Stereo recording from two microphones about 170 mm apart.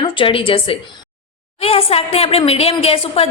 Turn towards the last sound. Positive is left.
turn(degrees=35)  # may be behind; listen again after turning